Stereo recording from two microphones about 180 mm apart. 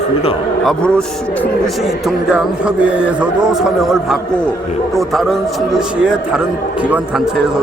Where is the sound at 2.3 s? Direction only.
5° right (ahead or behind).